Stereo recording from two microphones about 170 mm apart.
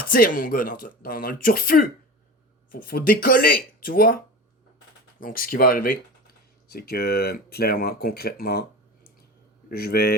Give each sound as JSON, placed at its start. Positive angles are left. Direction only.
{"t": 0.0, "sound": "speech", "side_deg": 55}
{"t": 5.2, "sound": "speech", "side_deg": 55}
{"t": 9.6, "sound": "speech", "side_deg": 65}